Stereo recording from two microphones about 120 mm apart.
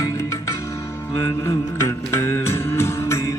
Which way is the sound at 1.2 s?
20° left (ahead or behind).